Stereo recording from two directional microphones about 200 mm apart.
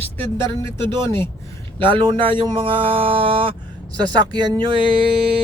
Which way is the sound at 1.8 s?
25° right (ahead or behind).